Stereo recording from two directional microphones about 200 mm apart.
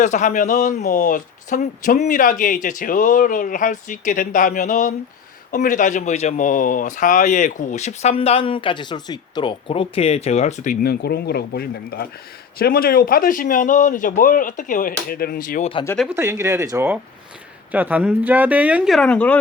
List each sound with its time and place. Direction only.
0.0 s a man's voice: 40° left (ahead or behind)
16.0 s speech: 15° right (ahead or behind); by 19.4 s 5° left (ahead or behind)